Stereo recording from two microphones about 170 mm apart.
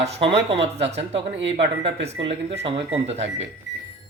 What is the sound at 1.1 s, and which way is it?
Speech, 90° right.